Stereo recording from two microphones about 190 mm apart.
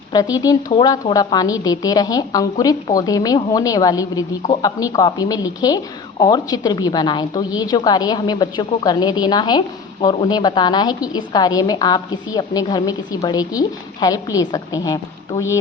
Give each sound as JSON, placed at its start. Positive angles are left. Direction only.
{"t": 0.1, "sound": "a woman's voice", "side_deg": 20}